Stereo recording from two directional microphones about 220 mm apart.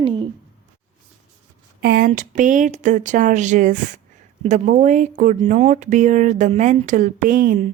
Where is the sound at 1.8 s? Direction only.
45° right (ahead or behind).